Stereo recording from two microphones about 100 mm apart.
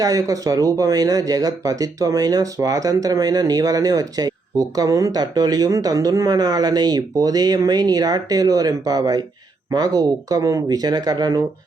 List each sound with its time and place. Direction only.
0.0 s speech: 35° right (ahead or behind)